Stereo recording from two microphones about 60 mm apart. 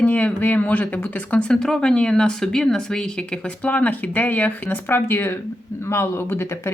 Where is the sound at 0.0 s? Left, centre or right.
Left.